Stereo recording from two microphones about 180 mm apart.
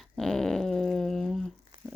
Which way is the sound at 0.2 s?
Centre (ahead or behind).